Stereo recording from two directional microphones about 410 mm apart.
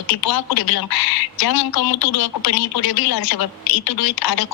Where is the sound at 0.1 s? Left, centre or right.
Left.